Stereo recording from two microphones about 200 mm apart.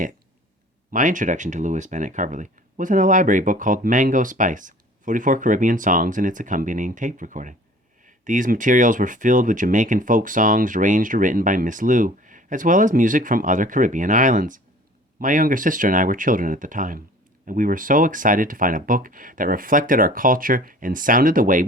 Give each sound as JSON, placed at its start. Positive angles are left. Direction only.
{"t": 0.9, "sound": "speech", "side_deg": -40}